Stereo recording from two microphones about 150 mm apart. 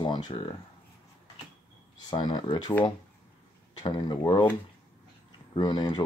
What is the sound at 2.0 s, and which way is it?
Speech, 30° left (ahead or behind).